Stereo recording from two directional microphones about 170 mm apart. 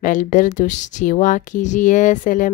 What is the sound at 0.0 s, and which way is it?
Speech, 50° left (ahead or behind).